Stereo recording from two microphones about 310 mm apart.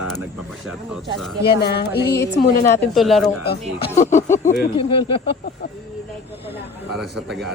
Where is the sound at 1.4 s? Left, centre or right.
Left.